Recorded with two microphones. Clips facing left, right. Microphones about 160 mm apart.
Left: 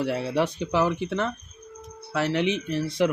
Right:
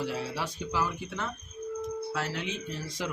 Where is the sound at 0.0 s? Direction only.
65° left (ahead or behind).